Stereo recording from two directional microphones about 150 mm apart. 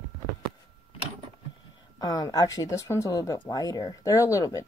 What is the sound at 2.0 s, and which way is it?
Speech, 25° left (ahead or behind).